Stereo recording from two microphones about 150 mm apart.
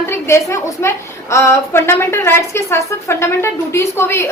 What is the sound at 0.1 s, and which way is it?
A woman's voice, 20° left (ahead or behind).